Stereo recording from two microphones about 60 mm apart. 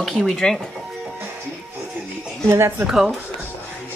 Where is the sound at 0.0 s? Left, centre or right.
Centre.